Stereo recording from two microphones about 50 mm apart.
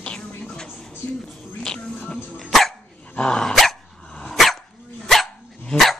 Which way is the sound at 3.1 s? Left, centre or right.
Centre.